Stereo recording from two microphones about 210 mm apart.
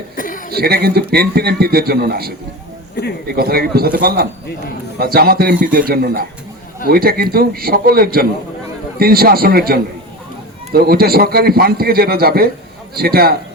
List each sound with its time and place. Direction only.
0.2 s chuckle: 40° left (ahead or behind)
0.5 s a man's voice: 50° right (ahead or behind)
2.9 s speech: 50° left (ahead or behind)
3.2 s a man's voice: 45° right (ahead or behind)